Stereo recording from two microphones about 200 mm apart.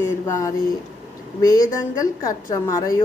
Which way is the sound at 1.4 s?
15° left (ahead or behind).